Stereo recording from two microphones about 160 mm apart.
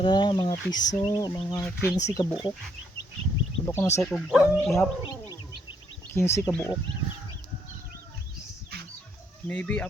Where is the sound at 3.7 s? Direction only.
15° left (ahead or behind).